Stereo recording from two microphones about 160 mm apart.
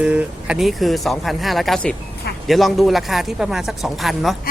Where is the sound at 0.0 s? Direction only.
10° right (ahead or behind).